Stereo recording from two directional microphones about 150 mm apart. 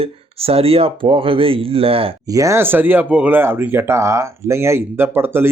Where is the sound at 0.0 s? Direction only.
40° right (ahead or behind).